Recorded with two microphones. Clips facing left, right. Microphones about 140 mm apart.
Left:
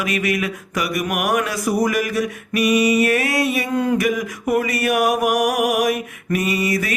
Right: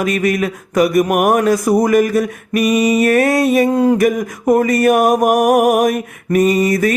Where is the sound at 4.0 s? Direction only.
50° right (ahead or behind).